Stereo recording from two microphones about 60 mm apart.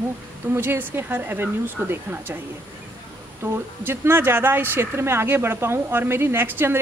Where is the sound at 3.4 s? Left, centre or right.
Right.